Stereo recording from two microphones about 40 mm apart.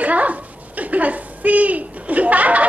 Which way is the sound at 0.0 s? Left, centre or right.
Right.